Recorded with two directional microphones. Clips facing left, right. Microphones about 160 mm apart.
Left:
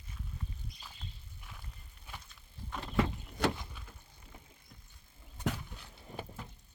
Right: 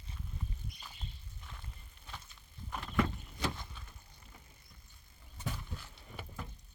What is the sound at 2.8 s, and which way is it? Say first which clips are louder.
Vehicle: left 1 dB; 25° left (ahead or behind).